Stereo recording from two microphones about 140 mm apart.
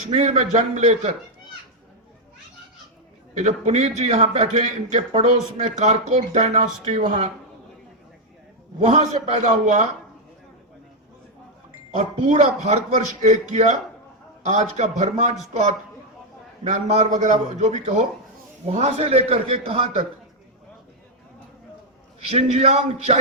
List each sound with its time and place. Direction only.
0.1 s a man's voice: 50° right (ahead or behind)
3.3 s a man's voice: 55° right (ahead or behind)
8.8 s a man's voice: 55° right (ahead or behind)
11.9 s a man's voice: 55° right (ahead or behind)
16.6 s a man's voice: 55° right (ahead or behind)
22.2 s a man's voice: 45° right (ahead or behind)